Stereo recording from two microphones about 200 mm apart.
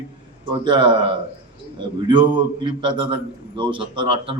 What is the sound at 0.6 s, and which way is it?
Speech, 25° right (ahead or behind).